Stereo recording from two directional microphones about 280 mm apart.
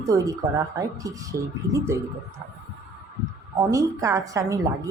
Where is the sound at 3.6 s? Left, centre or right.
Centre.